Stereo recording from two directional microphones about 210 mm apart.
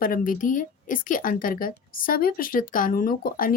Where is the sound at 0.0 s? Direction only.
40° left (ahead or behind).